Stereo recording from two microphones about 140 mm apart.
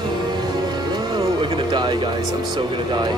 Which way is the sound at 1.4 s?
35° right (ahead or behind).